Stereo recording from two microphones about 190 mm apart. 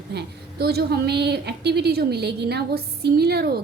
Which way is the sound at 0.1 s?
60° right (ahead or behind).